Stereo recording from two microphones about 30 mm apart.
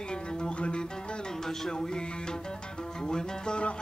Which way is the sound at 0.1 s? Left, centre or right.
Left.